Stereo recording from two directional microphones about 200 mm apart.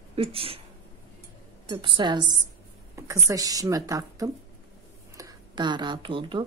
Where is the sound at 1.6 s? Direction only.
25° right (ahead or behind).